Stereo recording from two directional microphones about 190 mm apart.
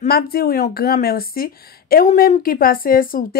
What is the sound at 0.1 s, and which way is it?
Speech, 50° left (ahead or behind).